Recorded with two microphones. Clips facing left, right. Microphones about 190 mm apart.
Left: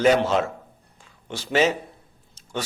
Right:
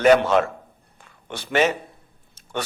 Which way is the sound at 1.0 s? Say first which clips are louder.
Even; 60° right (ahead or behind).